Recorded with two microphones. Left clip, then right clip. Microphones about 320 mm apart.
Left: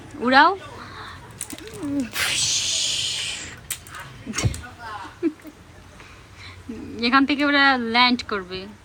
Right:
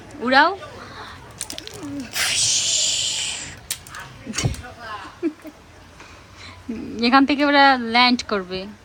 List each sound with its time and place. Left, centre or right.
0.2 s a sound: centre
1.5 s snake: centre
6.9 s speech: centre